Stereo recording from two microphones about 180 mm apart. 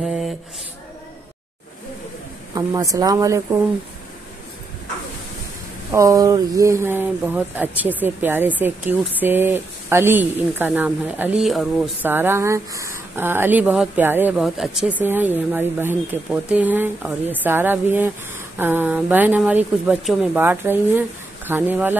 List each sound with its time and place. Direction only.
0.0 s a sound: centre (ahead or behind)
2.5 s speech: 20° right (ahead or behind)
5.9 s speech: 20° right (ahead or behind)